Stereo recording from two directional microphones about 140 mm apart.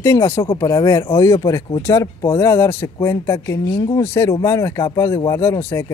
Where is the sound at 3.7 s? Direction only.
30° left (ahead or behind).